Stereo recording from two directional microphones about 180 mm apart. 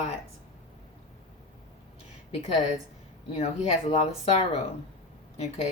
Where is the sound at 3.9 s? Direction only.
35° left (ahead or behind).